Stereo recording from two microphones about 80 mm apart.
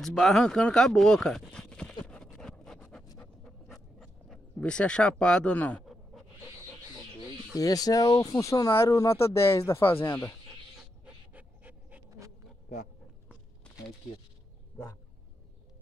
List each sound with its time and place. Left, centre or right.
0.0 s speech: centre
2.0 s vehicle: centre
3.2 s pant: centre
4.6 s speech: centre
7.5 s speech: left
11.3 s pant: centre